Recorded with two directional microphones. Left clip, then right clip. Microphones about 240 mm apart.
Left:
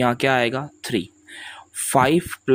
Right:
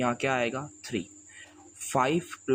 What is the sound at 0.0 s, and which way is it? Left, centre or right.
Speech, left.